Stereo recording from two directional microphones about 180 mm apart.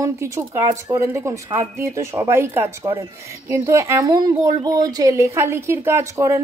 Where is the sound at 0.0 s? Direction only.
15° right (ahead or behind).